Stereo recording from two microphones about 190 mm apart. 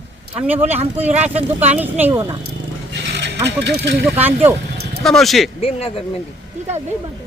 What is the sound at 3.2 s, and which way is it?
Speech, 65° right (ahead or behind).